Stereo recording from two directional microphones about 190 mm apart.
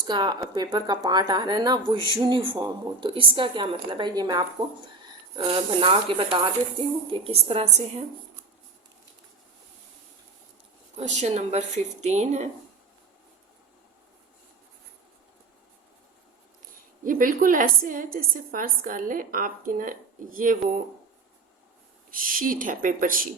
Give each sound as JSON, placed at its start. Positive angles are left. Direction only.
{"t": 0.1, "sound": "a woman's voice", "side_deg": -20}
{"t": 5.5, "sound": "a woman's voice", "side_deg": -30}
{"t": 10.9, "sound": "a woman's voice", "side_deg": -35}
{"t": 17.0, "sound": "a woman's voice", "side_deg": -45}
{"t": 22.1, "sound": "a woman's voice", "side_deg": -45}